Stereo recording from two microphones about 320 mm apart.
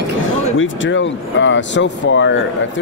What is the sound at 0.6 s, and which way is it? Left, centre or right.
Speech, left.